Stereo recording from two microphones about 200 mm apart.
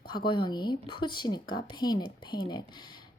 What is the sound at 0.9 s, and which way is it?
Speech, 25° left (ahead or behind).